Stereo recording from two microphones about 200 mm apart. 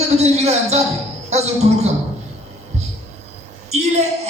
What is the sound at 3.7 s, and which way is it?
Speech, 35° right (ahead or behind).